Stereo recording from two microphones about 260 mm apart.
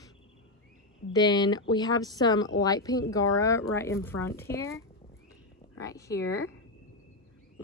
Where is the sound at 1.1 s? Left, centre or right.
Centre.